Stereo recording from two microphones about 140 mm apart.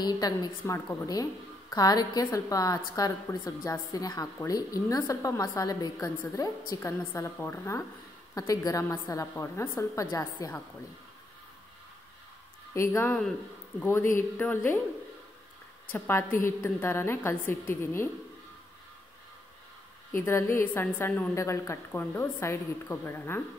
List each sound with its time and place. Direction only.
0.0 s a woman's voice: 25° left (ahead or behind)
12.7 s a woman's voice: 20° left (ahead or behind)
15.9 s a woman's voice: 15° left (ahead or behind)
20.1 s a woman's voice: 20° left (ahead or behind)